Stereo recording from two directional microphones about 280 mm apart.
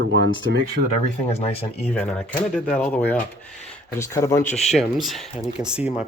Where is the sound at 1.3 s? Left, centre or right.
Left.